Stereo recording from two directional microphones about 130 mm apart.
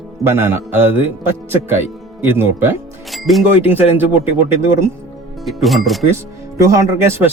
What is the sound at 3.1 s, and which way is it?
Music, centre (ahead or behind).